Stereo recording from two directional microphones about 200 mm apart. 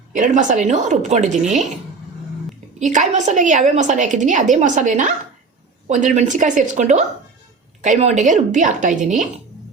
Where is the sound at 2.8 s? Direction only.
35° right (ahead or behind).